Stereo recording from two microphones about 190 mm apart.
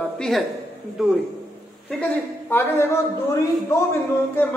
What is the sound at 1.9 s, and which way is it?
Speech, 10° left (ahead or behind).